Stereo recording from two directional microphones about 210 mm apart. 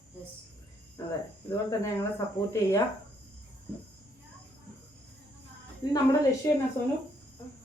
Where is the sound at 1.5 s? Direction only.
15° left (ahead or behind).